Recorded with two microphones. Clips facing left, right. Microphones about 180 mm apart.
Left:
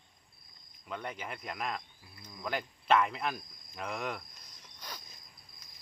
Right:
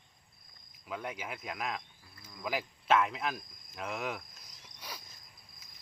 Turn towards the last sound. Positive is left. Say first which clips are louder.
# even
turn(degrees=-5)  # may be behind; listen again after turning